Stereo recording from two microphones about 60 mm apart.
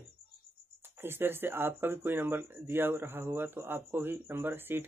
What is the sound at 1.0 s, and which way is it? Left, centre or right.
Speech, right.